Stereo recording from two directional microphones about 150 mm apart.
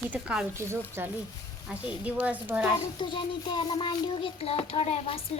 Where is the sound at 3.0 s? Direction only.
30° left (ahead or behind).